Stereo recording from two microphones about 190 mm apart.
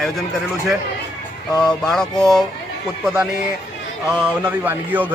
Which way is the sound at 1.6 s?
5° left (ahead or behind).